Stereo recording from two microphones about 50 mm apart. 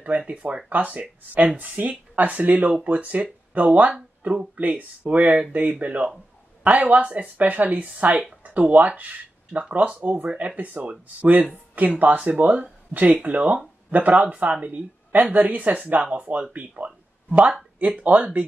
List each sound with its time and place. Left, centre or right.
0.3 s speech: right
16.2 s speech: right